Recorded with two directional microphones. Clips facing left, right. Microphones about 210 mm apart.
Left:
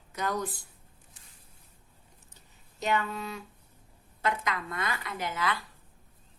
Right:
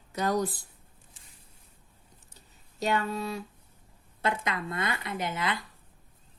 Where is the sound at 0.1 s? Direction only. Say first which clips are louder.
Right 4 dB; 35° right (ahead or behind).